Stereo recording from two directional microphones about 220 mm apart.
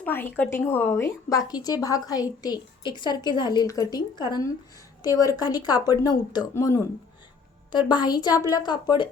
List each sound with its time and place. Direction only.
0.0 s a woman's voice: 10° left (ahead or behind)